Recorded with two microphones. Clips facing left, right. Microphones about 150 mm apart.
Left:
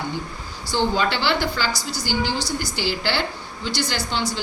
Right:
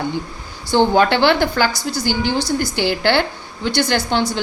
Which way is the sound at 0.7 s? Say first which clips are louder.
Right 8 dB; 60° right (ahead or behind).